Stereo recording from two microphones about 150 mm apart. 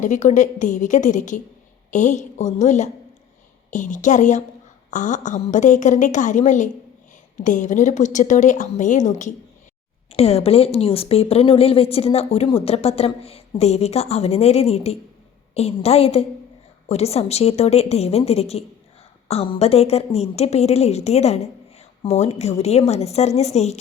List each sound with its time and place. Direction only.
0.0 s a woman's voice: 55° left (ahead or behind)
10.1 s a woman's voice: 45° left (ahead or behind)